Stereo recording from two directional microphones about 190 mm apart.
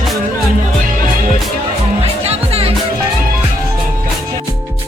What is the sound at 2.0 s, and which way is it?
Music, 30° right (ahead or behind).